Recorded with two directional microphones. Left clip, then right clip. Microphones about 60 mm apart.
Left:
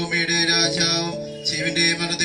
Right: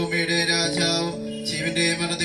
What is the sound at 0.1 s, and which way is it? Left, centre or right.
Music, left.